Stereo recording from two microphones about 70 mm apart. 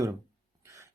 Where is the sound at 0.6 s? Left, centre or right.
Right.